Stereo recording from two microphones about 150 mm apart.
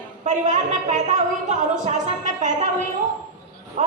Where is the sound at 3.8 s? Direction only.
55° right (ahead or behind).